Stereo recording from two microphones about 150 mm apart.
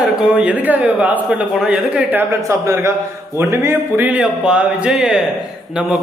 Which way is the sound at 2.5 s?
20° right (ahead or behind).